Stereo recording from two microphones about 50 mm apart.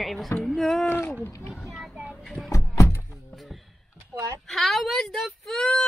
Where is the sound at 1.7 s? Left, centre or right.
Centre.